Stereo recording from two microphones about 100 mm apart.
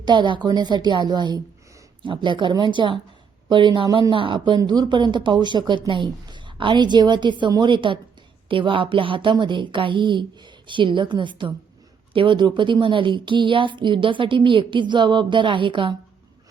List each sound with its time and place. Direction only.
0.0 s a woman's voice: 50° right (ahead or behind)
4.6 s a woman's voice: 45° right (ahead or behind)